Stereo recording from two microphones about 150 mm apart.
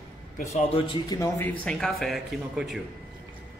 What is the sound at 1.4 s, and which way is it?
A woman's voice, 5° left (ahead or behind).